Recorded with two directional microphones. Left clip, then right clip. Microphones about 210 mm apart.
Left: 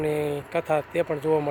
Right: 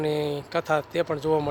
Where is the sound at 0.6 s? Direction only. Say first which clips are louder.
Even; 10° right (ahead or behind).